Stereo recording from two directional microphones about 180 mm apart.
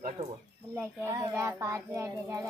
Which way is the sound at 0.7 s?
15° right (ahead or behind).